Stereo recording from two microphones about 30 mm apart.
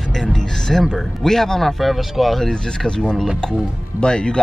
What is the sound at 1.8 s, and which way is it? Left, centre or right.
Speech, centre.